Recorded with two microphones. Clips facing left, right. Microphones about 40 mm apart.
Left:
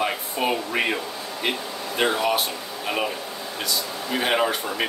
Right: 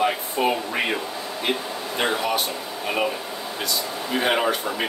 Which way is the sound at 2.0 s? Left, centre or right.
Centre.